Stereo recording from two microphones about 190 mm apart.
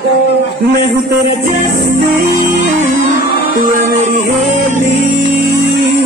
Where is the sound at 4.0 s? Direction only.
40° right (ahead or behind).